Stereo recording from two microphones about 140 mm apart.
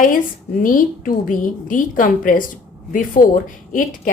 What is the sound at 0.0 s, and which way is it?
A woman's voice, 75° left (ahead or behind).